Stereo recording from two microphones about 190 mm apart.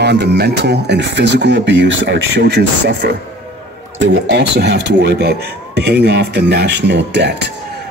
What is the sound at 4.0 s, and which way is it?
Speech, 75° right (ahead or behind).